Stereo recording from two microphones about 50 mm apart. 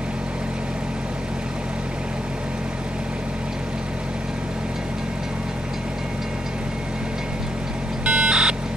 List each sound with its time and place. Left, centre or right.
8.0 s vehicle: centre